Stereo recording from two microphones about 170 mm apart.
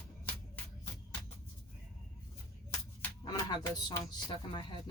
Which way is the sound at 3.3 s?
25° left (ahead or behind).